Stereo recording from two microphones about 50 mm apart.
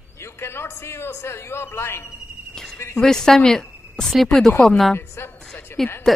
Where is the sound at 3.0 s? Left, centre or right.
Centre.